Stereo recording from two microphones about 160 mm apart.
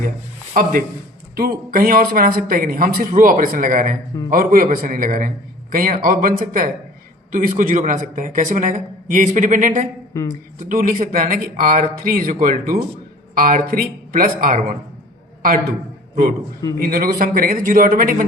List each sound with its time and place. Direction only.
0.5 s a man's voice: 60° right (ahead or behind)
16.8 s speech: 65° right (ahead or behind)